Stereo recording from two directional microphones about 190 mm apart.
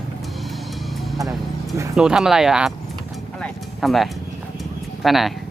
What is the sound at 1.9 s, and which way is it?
Speech, 5° right (ahead or behind).